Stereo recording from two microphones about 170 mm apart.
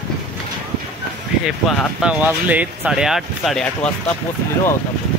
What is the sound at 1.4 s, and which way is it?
Speech, centre (ahead or behind).